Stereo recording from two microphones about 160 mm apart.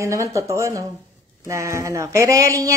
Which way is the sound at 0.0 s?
20° right (ahead or behind).